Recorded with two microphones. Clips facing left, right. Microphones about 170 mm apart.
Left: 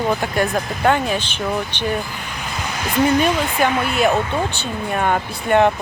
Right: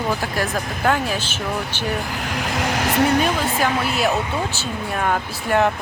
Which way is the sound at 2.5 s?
90° right.